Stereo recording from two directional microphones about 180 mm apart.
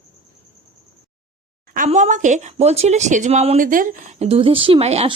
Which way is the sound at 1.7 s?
45° right (ahead or behind).